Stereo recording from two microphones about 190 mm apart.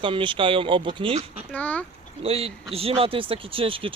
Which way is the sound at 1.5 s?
10° left (ahead or behind).